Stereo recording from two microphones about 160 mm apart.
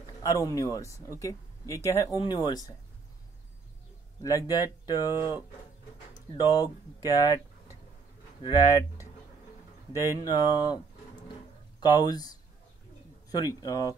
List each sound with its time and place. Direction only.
0.2 s speech: 20° left (ahead or behind)
4.2 s speech: 20° left (ahead or behind)
6.1 s speech: 25° left (ahead or behind)
8.4 s speech: 25° left (ahead or behind)
11.8 s speech: 25° left (ahead or behind)